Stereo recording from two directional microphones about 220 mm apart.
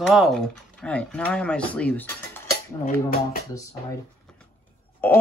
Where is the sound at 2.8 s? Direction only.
40° left (ahead or behind).